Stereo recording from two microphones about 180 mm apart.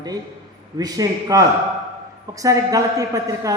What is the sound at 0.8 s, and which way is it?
A woman's voice, 20° right (ahead or behind).